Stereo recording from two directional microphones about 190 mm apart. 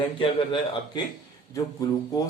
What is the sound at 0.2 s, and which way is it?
Speech, 25° left (ahead or behind).